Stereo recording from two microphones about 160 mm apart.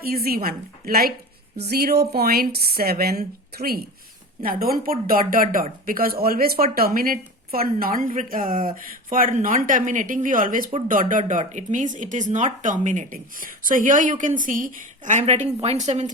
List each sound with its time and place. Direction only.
0.0 s speech: 70° right (ahead or behind)
1.5 s speech: 80° right; by 16.0 s 45° right (ahead or behind)